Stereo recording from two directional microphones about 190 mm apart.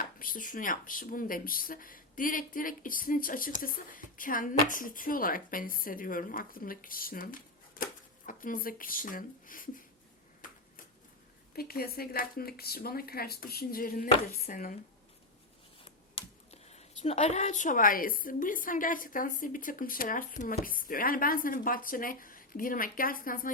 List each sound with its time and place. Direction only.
0.0 s speech: 45° left (ahead or behind)
11.5 s speech: 50° left (ahead or behind)
16.5 s speech: 35° left (ahead or behind)